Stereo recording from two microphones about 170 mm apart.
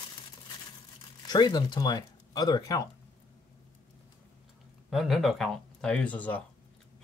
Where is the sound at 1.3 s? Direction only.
25° left (ahead or behind).